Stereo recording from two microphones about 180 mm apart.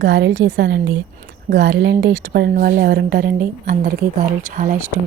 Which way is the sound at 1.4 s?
70° right (ahead or behind).